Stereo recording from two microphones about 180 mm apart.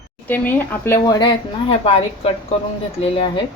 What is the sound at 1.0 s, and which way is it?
Speech, 20° left (ahead or behind).